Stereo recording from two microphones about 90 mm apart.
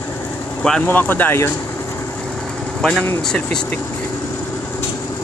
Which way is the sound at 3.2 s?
10° left (ahead or behind).